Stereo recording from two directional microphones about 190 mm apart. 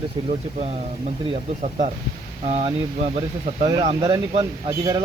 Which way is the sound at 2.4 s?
35° right (ahead or behind).